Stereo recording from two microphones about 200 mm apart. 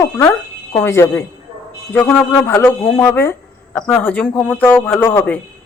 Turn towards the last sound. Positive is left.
turn(degrees=10)  # may be behind; listen again after turning